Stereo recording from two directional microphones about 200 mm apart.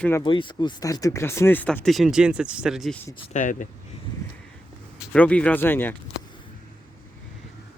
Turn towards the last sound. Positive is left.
turn(degrees=10)  # may be behind; listen again after turning